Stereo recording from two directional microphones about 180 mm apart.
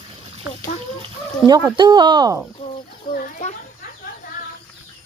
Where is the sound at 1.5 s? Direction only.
20° right (ahead or behind).